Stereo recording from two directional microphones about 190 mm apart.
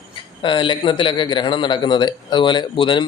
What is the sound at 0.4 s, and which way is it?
Speech, 25° left (ahead or behind).